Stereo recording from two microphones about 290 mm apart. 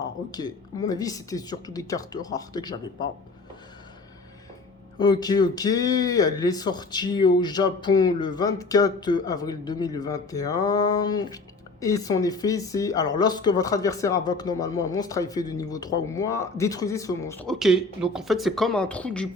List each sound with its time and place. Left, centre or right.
0.0 s speech: centre
4.9 s speech: centre